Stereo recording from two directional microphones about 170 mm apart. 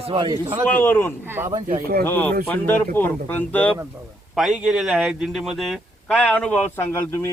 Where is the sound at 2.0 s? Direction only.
10° left (ahead or behind).